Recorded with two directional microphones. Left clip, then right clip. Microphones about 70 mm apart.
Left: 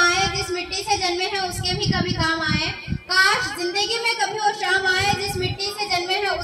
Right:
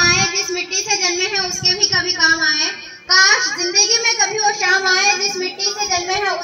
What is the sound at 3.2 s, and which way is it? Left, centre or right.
A child's voice, centre.